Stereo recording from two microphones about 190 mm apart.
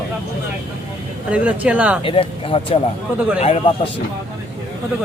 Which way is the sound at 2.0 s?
30° left (ahead or behind).